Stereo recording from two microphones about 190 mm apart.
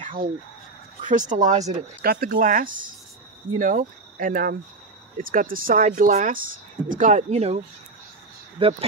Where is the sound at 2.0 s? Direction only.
50° right (ahead or behind).